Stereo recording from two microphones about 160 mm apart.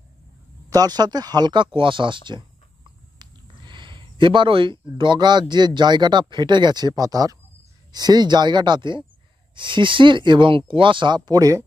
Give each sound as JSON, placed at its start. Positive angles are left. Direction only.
{"t": 0.7, "sound": "speech", "side_deg": -25}
{"t": 3.2, "sound": "a sound", "side_deg": -30}
{"t": 5.8, "sound": "speech", "side_deg": -25}